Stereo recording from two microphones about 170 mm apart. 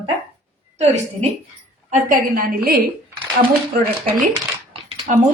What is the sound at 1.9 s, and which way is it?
Speech, 55° right (ahead or behind).